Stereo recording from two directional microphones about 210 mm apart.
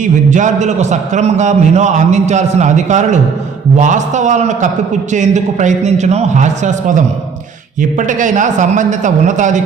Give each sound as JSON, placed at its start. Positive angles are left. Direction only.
{"t": 0.0, "sound": "a man's voice", "side_deg": -35}